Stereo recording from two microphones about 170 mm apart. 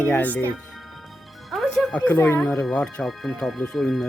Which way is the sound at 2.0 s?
15° left (ahead or behind).